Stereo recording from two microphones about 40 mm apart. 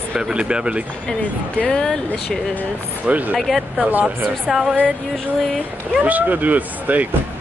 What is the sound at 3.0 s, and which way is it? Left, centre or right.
Speech, right.